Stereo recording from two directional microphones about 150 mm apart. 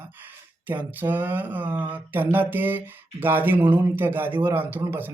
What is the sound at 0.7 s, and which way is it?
Speech, 10° right (ahead or behind).